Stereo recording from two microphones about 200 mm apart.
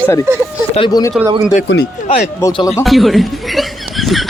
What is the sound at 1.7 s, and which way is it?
Speech, 65° left (ahead or behind).